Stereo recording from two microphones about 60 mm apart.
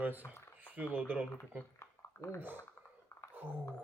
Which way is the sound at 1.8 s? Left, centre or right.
Left.